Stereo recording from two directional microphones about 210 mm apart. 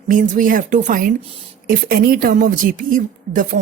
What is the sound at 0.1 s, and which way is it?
Speech, 40° right (ahead or behind).